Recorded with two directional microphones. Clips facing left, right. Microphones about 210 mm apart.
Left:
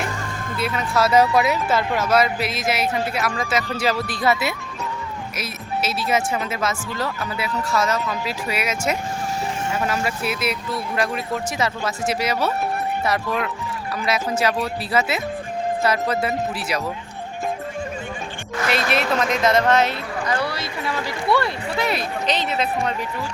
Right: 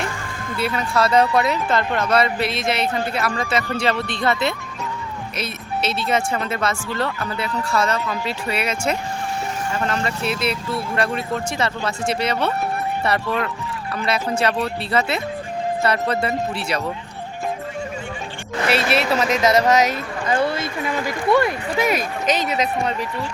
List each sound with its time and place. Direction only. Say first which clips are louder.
0.5 s speech: right 1 dB; centre (ahead or behind)
18.9 s speech: right 2 dB; 5° right (ahead or behind)
20.2 s speech: right 5 dB; 25° right (ahead or behind)
22.8 s speech: right 1 dB; centre (ahead or behind)